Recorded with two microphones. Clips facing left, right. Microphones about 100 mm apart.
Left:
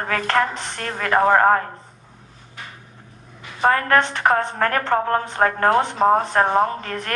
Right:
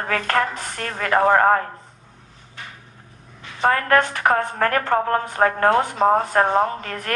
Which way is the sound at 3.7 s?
35° left (ahead or behind).